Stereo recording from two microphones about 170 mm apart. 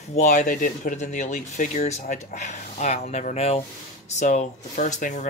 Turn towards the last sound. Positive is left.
turn(degrees=45)  # may be behind; listen again after turning